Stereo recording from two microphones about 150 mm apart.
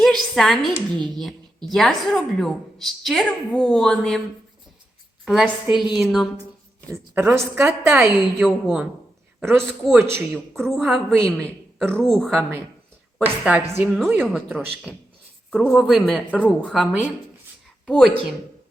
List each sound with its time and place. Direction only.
0.0 s a woman's voice: 5° left (ahead or behind)
5.2 s a woman's voice: 5° right (ahead or behind)
6.9 s a woman's voice: 10° right (ahead or behind)
9.6 s a woman's voice: 5° left (ahead or behind)
10.0 s a woman's voice: 15° right (ahead or behind)
10.8 s a woman's voice: centre (ahead or behind)